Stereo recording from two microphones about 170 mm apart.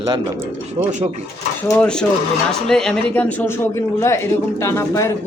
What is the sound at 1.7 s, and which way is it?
Speech, 5° left (ahead or behind).